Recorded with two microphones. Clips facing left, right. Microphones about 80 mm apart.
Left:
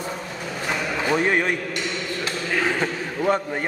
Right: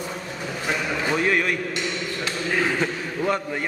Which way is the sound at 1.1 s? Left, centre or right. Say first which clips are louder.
Left 2 dB; left.